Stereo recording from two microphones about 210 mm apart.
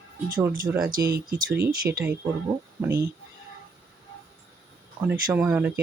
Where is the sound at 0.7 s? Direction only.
5° right (ahead or behind).